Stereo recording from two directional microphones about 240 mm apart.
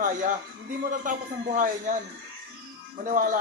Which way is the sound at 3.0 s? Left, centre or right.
Right.